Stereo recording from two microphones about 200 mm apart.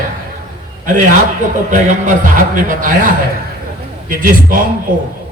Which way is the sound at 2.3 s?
40° right (ahead or behind).